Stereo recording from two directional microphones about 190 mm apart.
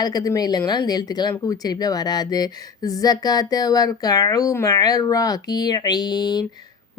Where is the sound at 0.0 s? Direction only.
20° left (ahead or behind).